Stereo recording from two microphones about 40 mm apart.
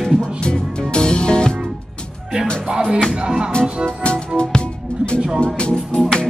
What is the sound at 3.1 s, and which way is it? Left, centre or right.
Music, right.